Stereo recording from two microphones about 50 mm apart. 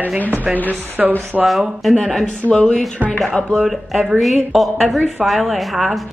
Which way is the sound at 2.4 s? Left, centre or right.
Centre.